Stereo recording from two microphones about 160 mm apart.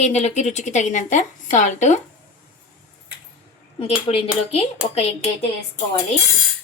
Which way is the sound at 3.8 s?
40° left (ahead or behind).